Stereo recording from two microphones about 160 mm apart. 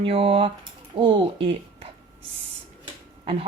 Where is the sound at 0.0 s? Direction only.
35° right (ahead or behind).